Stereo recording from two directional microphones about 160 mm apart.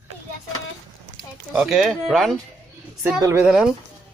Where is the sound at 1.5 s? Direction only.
5° right (ahead or behind).